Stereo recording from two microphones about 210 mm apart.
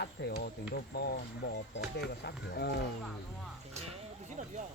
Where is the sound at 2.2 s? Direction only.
50° left (ahead or behind).